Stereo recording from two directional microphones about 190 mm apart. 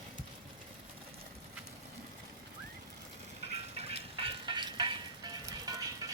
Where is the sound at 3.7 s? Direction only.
30° right (ahead or behind).